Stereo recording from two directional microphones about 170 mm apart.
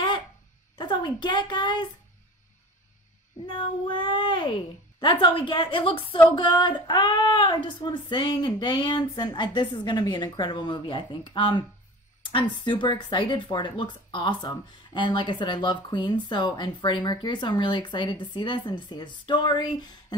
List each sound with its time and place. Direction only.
0.7 s a woman's voice: 25° left (ahead or behind)
3.4 s speech: 30° left (ahead or behind)